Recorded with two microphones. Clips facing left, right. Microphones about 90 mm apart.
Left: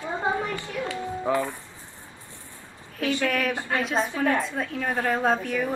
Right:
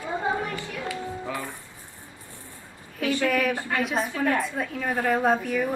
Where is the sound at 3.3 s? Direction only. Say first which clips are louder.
Right 1 dB; 5° right (ahead or behind).